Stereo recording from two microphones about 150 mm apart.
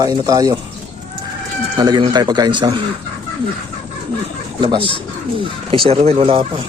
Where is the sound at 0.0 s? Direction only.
25° right (ahead or behind).